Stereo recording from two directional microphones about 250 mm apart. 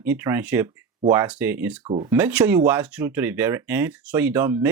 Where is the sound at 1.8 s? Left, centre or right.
Right.